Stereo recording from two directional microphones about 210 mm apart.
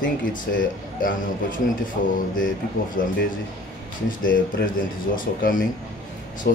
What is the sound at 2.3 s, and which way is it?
Speech, 40° left (ahead or behind).